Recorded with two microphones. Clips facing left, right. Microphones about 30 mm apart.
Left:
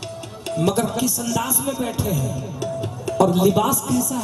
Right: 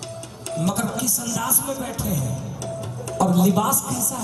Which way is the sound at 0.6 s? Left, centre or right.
Left.